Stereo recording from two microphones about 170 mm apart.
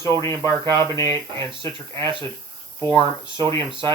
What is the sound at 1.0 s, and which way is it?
Speech, 15° left (ahead or behind).